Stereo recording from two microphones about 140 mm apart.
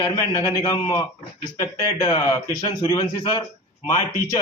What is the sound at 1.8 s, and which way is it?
A man's voice, 35° left (ahead or behind).